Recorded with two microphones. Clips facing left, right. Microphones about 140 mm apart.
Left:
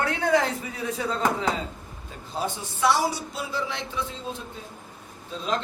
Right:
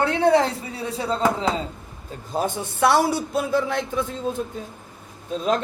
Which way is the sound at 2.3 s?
50° right (ahead or behind).